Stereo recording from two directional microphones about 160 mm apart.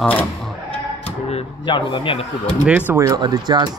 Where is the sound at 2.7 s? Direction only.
10° right (ahead or behind); by 3.8 s 25° right (ahead or behind).